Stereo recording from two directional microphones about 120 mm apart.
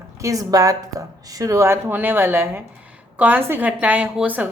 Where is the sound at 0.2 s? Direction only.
30° right (ahead or behind).